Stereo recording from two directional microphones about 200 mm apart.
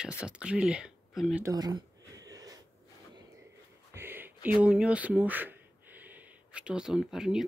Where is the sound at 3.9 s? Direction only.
10° right (ahead or behind).